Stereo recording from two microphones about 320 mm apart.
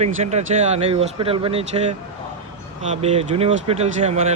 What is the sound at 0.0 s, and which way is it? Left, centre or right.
Speech, right.